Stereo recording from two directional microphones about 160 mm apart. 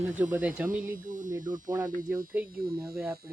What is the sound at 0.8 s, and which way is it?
Speech, 55° right (ahead or behind).